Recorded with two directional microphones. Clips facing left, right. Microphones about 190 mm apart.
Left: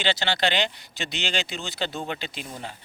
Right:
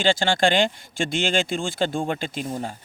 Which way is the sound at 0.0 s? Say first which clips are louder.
Right 5 dB; 45° right (ahead or behind).